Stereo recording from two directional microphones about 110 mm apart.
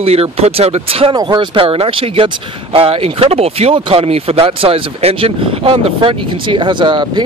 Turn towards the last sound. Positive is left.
turn(degrees=-45)  # may be behind; listen again after turning